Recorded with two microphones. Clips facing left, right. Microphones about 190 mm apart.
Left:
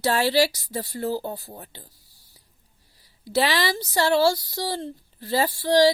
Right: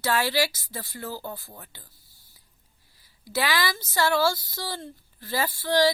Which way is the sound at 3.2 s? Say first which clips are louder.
Left 4 dB; 35° left (ahead or behind).